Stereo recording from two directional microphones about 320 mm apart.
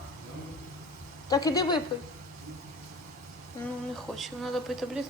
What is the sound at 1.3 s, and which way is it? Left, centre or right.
Speech, centre.